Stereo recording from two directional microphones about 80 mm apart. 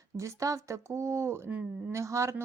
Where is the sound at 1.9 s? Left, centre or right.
Right.